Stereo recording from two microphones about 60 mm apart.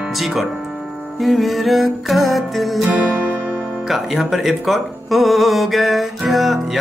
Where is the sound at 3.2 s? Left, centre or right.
Right.